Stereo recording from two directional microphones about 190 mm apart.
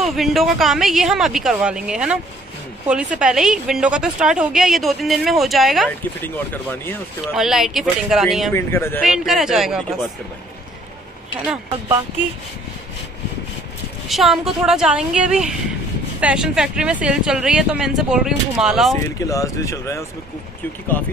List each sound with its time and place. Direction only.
0.0 s a woman's voice: centre (ahead or behind)
7.3 s a woman's voice: centre (ahead or behind)
8.5 s speech: 10° left (ahead or behind)
9.0 s a woman's voice: centre (ahead or behind)
14.0 s a woman's voice: centre (ahead or behind)
19.2 s speech: 15° left (ahead or behind)